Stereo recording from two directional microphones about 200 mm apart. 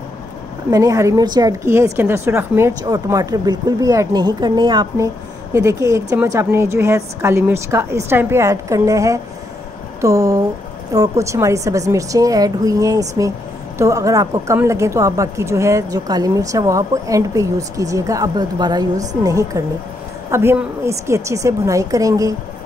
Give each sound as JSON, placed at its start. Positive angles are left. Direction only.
{"t": 0.7, "sound": "a woman's voice", "side_deg": -15}